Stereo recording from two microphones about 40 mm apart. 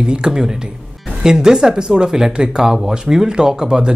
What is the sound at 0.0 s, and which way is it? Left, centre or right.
Speech, centre.